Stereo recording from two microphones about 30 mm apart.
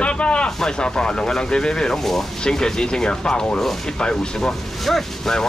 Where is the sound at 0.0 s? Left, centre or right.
Left.